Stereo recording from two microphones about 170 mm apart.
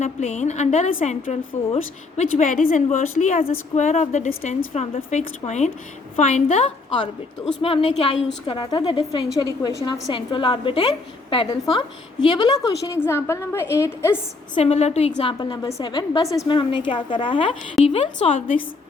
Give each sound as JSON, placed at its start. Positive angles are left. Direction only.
{"t": 0.0, "sound": "a woman's voice", "side_deg": 40}
{"t": 14.6, "sound": "a woman's voice", "side_deg": 40}